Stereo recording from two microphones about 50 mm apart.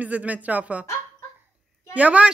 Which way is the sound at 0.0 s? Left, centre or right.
Right.